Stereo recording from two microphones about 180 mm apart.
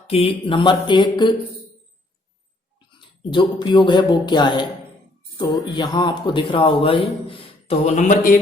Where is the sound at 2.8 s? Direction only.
25° left (ahead or behind).